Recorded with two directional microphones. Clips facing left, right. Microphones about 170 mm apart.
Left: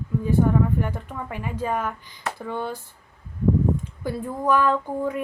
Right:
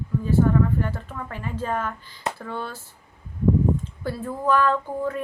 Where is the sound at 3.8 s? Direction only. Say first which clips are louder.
Left 1 dB; 15° left (ahead or behind).